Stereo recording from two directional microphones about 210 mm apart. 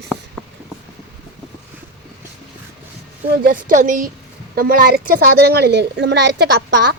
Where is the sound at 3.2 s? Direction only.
45° right (ahead or behind).